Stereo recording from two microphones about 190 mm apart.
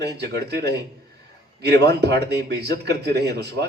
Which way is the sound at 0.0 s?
60° right (ahead or behind).